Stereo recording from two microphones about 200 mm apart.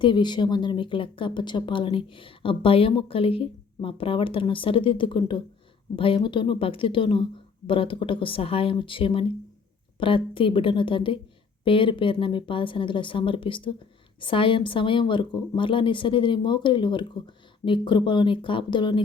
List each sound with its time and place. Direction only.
0.0 s speech: 25° left (ahead or behind)